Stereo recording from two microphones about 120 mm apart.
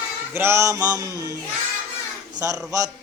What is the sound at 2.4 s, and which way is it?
Male singing, 30° right (ahead or behind).